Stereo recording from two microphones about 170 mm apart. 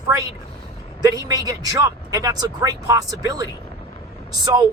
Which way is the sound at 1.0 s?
20° right (ahead or behind).